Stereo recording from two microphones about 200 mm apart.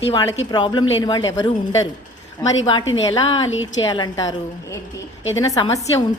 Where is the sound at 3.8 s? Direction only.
20° left (ahead or behind).